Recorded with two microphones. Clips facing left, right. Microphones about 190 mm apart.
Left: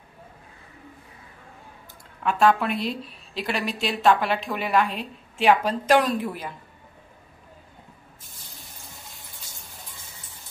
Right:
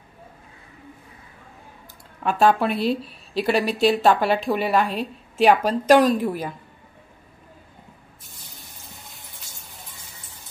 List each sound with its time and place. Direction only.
2.2 s a woman's voice: 35° right (ahead or behind)